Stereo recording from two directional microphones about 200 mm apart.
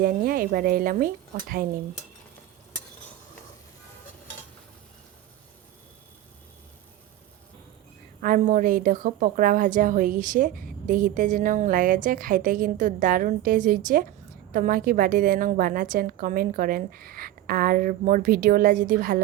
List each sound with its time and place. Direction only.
0.0 s a woman's voice: 45° right (ahead or behind)
8.2 s a woman's voice: 45° right (ahead or behind)